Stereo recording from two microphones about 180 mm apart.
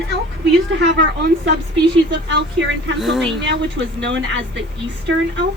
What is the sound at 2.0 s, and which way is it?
Speech, 80° right.